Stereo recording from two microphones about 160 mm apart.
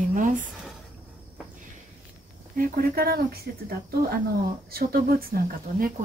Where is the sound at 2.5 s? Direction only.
70° right (ahead or behind).